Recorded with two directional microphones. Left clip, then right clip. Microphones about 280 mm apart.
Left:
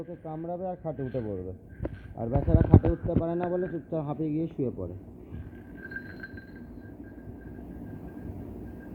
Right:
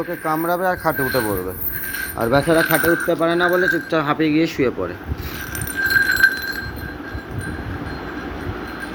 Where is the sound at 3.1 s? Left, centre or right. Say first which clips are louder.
Right 13 dB; centre.